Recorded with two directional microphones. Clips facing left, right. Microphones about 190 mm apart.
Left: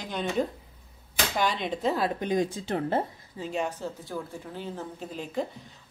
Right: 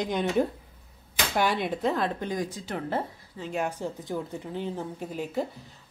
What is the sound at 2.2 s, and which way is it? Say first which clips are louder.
Speech: left 4 dB; 25° left (ahead or behind).